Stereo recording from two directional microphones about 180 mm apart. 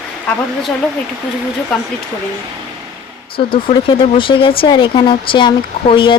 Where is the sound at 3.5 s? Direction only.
30° left (ahead or behind).